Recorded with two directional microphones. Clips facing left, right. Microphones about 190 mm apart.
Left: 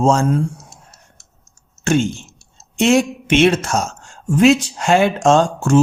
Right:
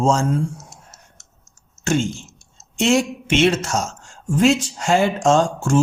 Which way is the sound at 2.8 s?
55° left (ahead or behind).